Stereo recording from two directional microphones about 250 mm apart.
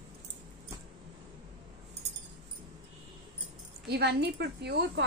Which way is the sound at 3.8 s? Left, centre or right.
Right.